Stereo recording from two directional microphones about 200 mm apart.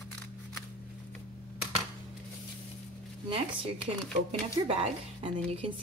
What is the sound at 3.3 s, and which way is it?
A woman's voice, 30° right (ahead or behind).